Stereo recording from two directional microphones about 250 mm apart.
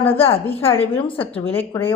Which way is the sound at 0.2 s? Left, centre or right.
Left.